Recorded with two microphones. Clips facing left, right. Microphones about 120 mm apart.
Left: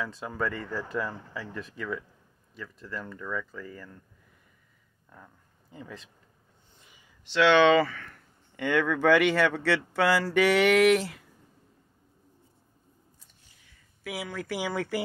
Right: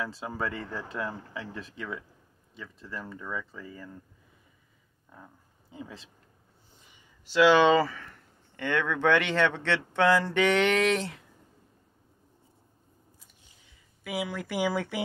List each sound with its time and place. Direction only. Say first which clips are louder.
0.3 s speech: left 2 dB; centre (ahead or behind)
5.1 s a sound: right 1 dB; 10° right (ahead or behind)
7.3 s speech: even; 5° right (ahead or behind)
8.5 s speech: left 3 dB; 10° left (ahead or behind)
14.0 s speech: right 2 dB; centre (ahead or behind)